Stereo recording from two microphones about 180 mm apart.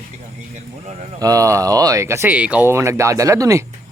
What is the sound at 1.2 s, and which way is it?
Speech, 20° right (ahead or behind).